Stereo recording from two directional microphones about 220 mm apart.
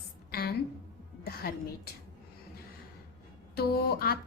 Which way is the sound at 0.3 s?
45° left (ahead or behind).